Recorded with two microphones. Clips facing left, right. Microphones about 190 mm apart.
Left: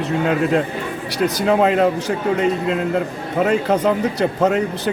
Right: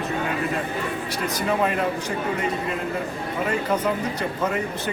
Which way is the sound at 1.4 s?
70° left (ahead or behind).